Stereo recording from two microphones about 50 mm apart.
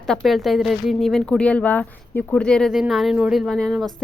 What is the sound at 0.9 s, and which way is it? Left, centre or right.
Speech, centre.